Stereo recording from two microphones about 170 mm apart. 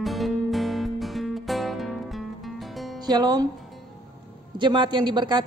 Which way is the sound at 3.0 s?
25° right (ahead or behind).